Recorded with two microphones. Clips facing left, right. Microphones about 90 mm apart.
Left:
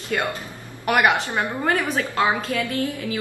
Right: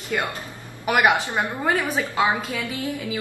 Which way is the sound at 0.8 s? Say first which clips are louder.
Even; 5° right (ahead or behind).